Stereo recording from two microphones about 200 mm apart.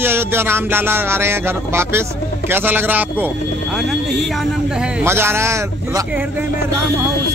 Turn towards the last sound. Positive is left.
turn(degrees=-15)  # may be behind; listen again after turning